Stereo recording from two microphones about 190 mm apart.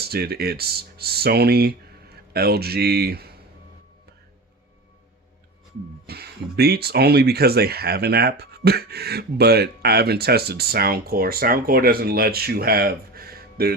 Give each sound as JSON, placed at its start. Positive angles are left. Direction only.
{"t": 0.0, "sound": "speech", "side_deg": -55}
{"t": 6.1, "sound": "speech", "side_deg": -55}